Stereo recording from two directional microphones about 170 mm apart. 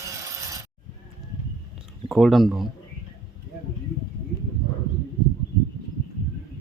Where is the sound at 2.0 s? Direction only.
Centre (ahead or behind).